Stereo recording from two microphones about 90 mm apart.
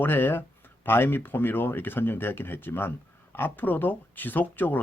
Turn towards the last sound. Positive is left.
turn(degrees=20)  # may be behind; listen again after turning